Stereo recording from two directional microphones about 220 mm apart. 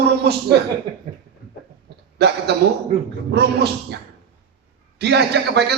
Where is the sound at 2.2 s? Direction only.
50° right (ahead or behind).